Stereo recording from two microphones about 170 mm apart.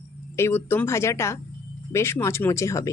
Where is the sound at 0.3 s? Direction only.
15° left (ahead or behind).